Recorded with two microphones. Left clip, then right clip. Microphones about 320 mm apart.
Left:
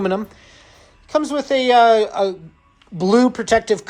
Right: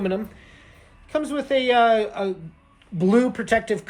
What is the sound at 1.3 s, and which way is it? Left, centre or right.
Speech, centre.